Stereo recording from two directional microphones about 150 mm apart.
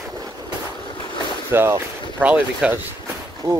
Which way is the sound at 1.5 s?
15° right (ahead or behind).